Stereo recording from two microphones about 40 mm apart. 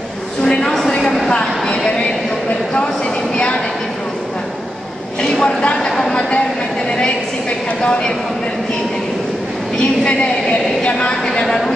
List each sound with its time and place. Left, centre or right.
0.4 s a sound: centre
0.7 s a sound: centre
3.3 s train: left
5.2 s speech: centre
7.8 s a woman's voice: centre
10.0 s a woman's voice: left
11.4 s speech: centre